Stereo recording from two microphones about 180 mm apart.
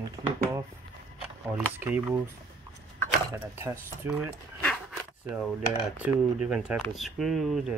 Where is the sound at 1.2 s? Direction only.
5° right (ahead or behind).